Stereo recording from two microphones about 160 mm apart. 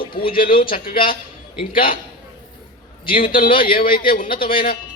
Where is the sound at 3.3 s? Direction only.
60° left (ahead or behind).